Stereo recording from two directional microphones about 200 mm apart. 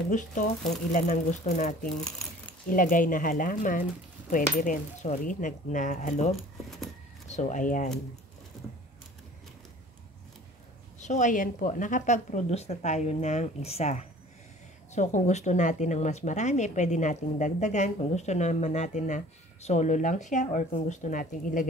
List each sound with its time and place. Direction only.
0.1 s speech: 40° left (ahead or behind)
11.0 s speech: 35° left (ahead or behind)